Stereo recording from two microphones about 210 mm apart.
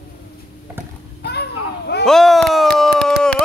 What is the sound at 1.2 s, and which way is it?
Children playing, 50° left (ahead or behind).